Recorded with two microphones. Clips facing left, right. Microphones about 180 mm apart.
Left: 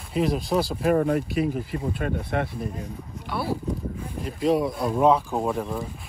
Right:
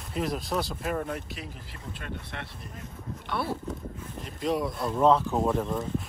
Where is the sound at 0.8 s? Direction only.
55° left (ahead or behind).